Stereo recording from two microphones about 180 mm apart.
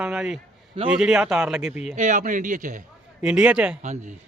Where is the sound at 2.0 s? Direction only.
45° right (ahead or behind).